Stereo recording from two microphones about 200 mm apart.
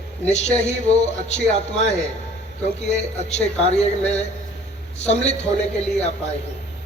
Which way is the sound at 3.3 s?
35° left (ahead or behind).